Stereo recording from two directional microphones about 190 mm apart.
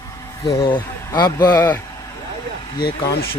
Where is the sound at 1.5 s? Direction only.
10° left (ahead or behind).